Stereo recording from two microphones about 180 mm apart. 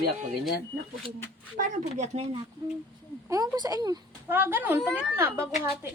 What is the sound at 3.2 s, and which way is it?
Speech, 20° right (ahead or behind).